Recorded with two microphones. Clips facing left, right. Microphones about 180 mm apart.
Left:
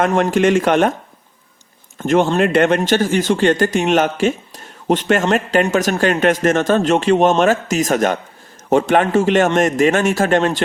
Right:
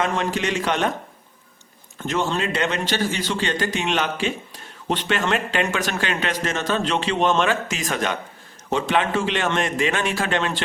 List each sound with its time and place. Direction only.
0.0 s speech: 50° left (ahead or behind)
2.0 s speech: 50° left (ahead or behind)